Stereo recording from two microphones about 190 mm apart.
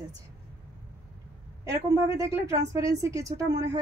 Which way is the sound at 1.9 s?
15° right (ahead or behind).